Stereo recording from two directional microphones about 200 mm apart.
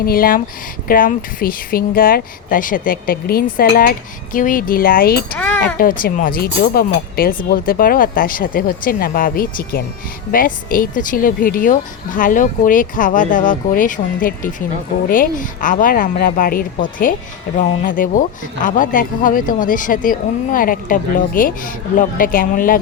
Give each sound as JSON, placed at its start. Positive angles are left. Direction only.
{"t": 0.0, "sound": "speech", "side_deg": 45}